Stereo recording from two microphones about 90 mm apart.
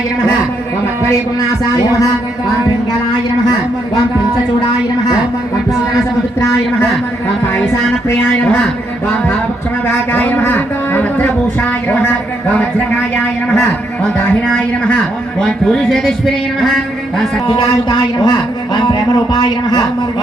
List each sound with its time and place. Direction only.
1.7 s music: 35° left (ahead or behind)
9.8 s a sound: 20° left (ahead or behind)
12.5 s a man's voice: 10° left (ahead or behind)
17.5 s a man's voice: 65° left (ahead or behind)